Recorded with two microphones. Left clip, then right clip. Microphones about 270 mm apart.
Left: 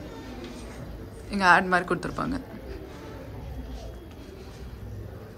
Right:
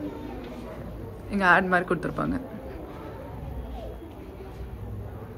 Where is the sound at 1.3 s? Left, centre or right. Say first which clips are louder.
Left 1 dB; centre.